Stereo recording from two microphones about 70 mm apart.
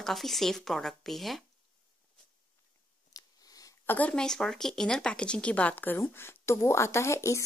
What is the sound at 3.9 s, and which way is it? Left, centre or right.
Speech, left.